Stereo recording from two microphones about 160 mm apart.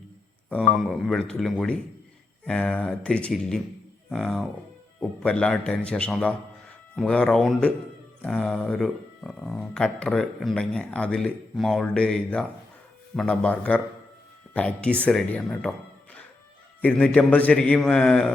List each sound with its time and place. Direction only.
0.5 s a man's voice: centre (ahead or behind)
16.8 s a man's voice: 10° left (ahead or behind)